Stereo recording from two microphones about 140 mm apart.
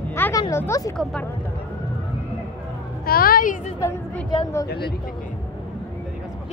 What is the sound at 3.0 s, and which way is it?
Speech, 90° left.